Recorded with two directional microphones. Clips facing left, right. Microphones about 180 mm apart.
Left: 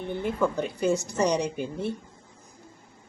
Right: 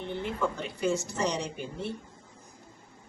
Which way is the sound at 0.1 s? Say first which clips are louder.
Left 5 dB; 45° left (ahead or behind).